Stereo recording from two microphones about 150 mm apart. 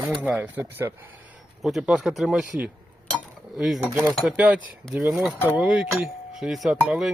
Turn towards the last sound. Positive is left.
turn(degrees=-5)  # may be behind; listen again after turning